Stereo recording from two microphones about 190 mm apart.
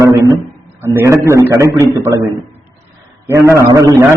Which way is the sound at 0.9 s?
15° right (ahead or behind).